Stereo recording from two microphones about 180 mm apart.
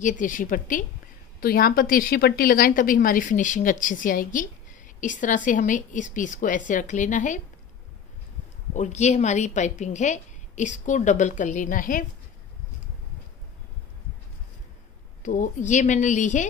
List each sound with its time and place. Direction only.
0.0 s a woman's voice: 45° left (ahead or behind)
8.7 s a woman's voice: 40° left (ahead or behind)
15.2 s a woman's voice: 45° left (ahead or behind)